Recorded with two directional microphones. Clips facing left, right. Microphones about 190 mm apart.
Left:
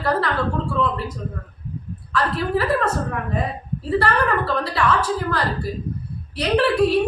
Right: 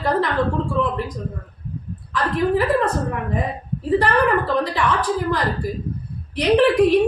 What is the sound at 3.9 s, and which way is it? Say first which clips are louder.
A woman's voice: right 3 dB; 15° right (ahead or behind).